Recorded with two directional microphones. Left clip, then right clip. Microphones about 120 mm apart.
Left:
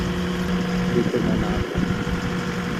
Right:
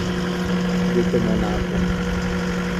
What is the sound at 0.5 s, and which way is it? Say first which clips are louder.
Vehicle: right 2 dB; 45° left (ahead or behind).